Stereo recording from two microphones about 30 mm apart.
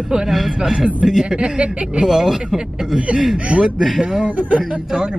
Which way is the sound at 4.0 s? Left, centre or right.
Right.